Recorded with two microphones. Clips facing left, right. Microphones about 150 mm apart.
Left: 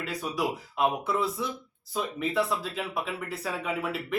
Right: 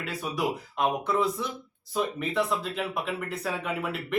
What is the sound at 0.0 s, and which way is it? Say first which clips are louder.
Speech: even; centre (ahead or behind).